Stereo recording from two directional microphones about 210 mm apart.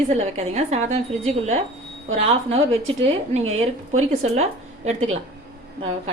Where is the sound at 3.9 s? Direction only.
30° right (ahead or behind).